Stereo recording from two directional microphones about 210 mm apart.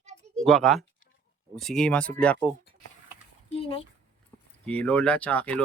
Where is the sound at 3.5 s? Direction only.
25° left (ahead or behind).